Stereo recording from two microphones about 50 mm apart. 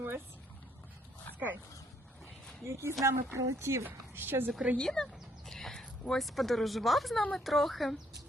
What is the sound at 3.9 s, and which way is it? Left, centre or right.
Speech, right.